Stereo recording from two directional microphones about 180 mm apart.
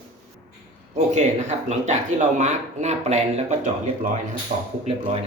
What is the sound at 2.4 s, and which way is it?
Speech, 40° right (ahead or behind).